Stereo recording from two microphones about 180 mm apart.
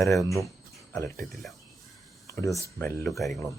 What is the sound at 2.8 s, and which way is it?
Speech, 10° left (ahead or behind).